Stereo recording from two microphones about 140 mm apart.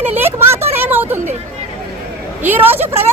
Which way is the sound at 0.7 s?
15° right (ahead or behind).